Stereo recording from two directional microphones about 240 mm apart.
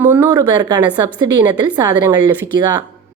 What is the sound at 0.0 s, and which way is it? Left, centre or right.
A woman's voice, centre.